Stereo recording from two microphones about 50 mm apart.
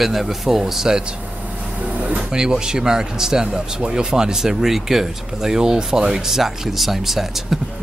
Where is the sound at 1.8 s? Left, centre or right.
Right.